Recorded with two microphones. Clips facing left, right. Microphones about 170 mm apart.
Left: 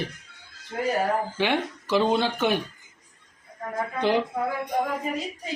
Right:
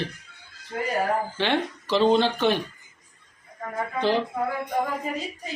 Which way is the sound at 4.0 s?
15° left (ahead or behind).